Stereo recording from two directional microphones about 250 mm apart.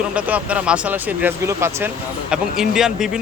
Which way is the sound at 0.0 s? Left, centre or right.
Centre.